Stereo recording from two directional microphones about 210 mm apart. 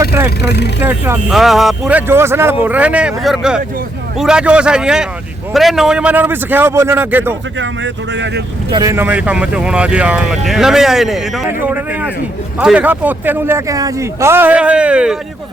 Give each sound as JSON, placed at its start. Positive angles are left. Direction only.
{"t": 0.0, "sound": "vehicle", "side_deg": -15}
{"t": 0.3, "sound": "speech", "side_deg": 55}
{"t": 0.8, "sound": "speech", "side_deg": -10}
{"t": 8.7, "sound": "speech", "side_deg": -15}